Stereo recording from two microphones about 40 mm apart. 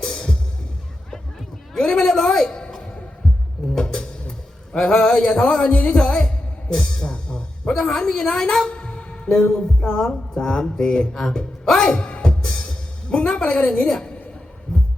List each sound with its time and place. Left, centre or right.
0.0 s music: centre
1.1 s a sound: centre
3.8 s music: centre
4.3 s a sound: left
4.9 s speech: centre
5.9 s music: left
7.8 s a woman's voice: centre
8.5 s music: left
9.5 s speech: left
11.8 s music: left
13.8 s a woman's voice: centre